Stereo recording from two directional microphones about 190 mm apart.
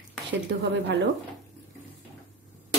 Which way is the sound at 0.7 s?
70° right (ahead or behind).